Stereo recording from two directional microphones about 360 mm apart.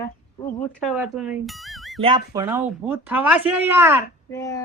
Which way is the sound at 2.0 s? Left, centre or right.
Centre.